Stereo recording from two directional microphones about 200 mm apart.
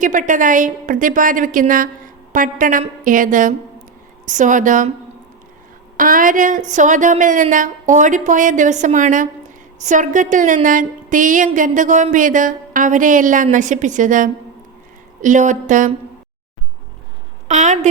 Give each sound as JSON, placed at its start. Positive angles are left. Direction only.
{"t": 0.0, "sound": "a woman's voice", "side_deg": -40}
{"t": 6.0, "sound": "a woman's voice", "side_deg": -40}
{"t": 17.5, "sound": "a woman's voice", "side_deg": -35}